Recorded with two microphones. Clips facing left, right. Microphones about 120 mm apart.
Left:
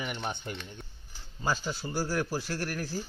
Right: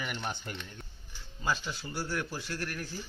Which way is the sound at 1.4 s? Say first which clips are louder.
Left 2 dB; 35° left (ahead or behind).